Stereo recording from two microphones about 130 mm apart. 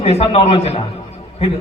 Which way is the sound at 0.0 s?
50° left (ahead or behind).